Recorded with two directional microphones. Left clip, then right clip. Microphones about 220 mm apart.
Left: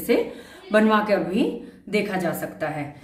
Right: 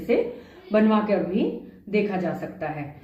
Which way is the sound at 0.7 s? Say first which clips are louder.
Left 3 dB; 25° left (ahead or behind).